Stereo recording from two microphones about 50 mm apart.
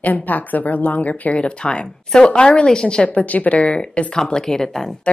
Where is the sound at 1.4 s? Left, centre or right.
Left.